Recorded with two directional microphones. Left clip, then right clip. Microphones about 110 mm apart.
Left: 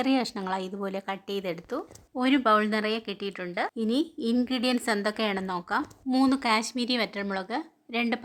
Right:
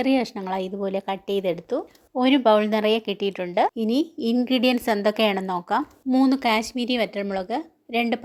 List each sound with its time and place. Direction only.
0.0 s a woman's voice: 15° right (ahead or behind)